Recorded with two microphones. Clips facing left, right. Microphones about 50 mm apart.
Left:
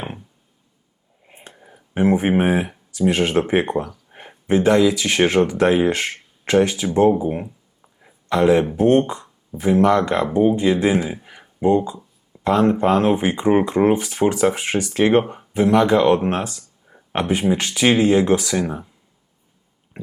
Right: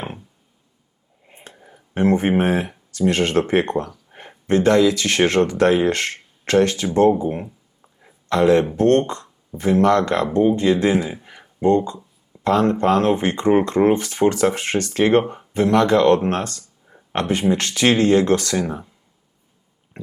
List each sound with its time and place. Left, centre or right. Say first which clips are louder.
1.3 s speech: even; centre